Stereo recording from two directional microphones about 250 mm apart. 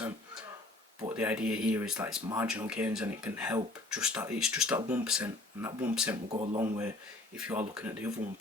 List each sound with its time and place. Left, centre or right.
1.1 s speech: centre
6.3 s speech: right
6.6 s speech: centre